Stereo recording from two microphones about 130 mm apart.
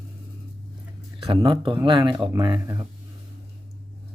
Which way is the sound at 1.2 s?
40° right (ahead or behind).